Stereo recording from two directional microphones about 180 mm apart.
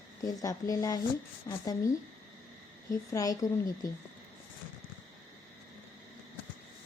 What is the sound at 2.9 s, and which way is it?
Speech, 20° left (ahead or behind).